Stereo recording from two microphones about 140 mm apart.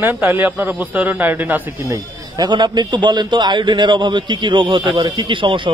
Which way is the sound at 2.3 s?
30° right (ahead or behind).